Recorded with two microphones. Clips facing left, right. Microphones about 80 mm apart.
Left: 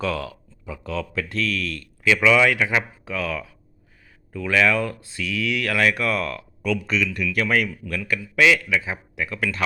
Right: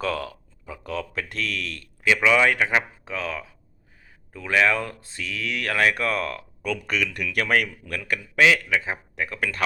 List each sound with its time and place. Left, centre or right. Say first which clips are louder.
0.0 s speech: left 1 dB; right
1.3 s speech: left 4 dB; right